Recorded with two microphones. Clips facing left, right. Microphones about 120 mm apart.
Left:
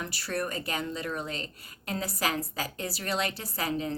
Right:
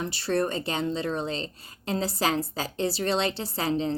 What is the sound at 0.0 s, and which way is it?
Speech, 25° right (ahead or behind).